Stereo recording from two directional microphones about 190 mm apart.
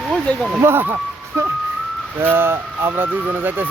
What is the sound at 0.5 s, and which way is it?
Speech, 10° right (ahead or behind).